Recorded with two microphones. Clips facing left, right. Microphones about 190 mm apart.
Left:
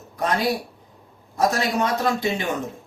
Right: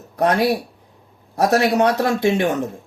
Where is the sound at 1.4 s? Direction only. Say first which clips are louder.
Right 5 dB; 70° right (ahead or behind).